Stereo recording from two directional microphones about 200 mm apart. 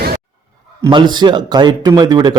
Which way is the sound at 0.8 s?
20° right (ahead or behind).